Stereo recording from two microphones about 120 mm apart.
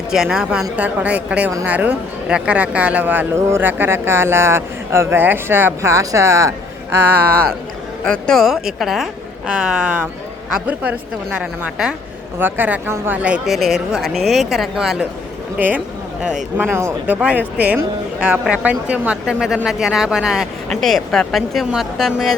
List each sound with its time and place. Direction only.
0.1 s a woman's voice: 5° right (ahead or behind); by 6.5 s 25° right (ahead or behind)
8.0 s a woman's voice: 5° left (ahead or behind)